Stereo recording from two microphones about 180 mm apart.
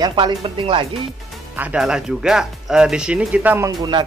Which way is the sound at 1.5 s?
5° right (ahead or behind).